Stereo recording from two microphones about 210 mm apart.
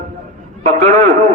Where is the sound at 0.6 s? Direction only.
35° right (ahead or behind).